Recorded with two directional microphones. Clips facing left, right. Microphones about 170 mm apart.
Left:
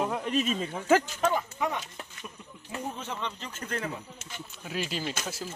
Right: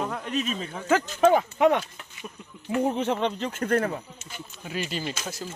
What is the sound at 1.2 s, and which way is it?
Speech, 75° right (ahead or behind).